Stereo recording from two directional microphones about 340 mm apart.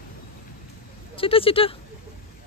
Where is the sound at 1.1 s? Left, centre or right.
Centre.